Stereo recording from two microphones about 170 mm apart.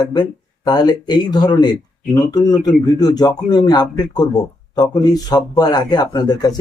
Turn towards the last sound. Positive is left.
turn(degrees=25)  # may be behind; listen again after turning